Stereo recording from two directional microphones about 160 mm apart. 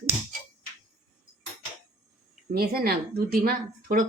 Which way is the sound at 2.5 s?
70° right (ahead or behind).